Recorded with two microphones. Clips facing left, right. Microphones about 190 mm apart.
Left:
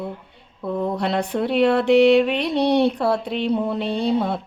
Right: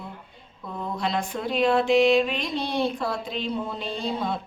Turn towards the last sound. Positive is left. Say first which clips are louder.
# left 7 dB
turn(degrees=65)  # may be behind; listen again after turning